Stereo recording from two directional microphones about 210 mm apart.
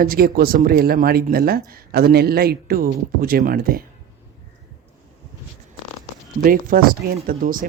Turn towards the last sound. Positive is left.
turn(degrees=-40)  # may be behind; listen again after turning